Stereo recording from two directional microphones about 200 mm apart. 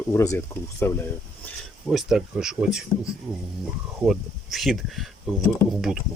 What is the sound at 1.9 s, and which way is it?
Speech, centre (ahead or behind).